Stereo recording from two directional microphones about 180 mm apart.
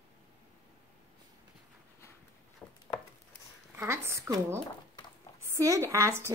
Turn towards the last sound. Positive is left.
turn(degrees=-15)  # may be behind; listen again after turning